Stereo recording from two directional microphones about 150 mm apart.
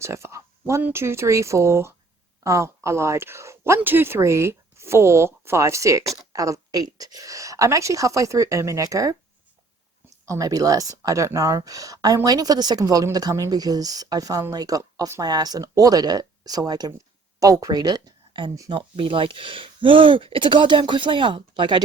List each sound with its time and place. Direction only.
0.0 s speech: 20° right (ahead or behind)
10.2 s speech: 20° right (ahead or behind)